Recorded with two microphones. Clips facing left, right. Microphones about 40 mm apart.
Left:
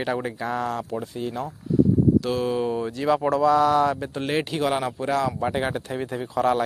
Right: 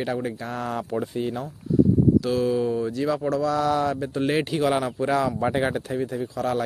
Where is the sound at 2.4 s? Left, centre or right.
Left.